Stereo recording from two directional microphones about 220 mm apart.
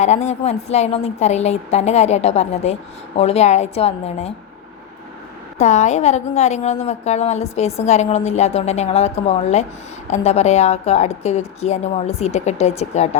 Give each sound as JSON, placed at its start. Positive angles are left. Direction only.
{"t": 0.0, "sound": "a woman's voice", "side_deg": 30}
{"t": 5.5, "sound": "a woman's voice", "side_deg": 30}